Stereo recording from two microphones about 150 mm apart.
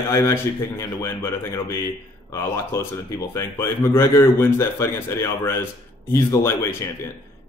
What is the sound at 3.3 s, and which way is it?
A man's voice, 20° left (ahead or behind).